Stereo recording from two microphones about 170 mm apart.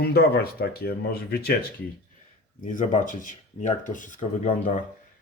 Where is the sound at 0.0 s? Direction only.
65° left (ahead or behind).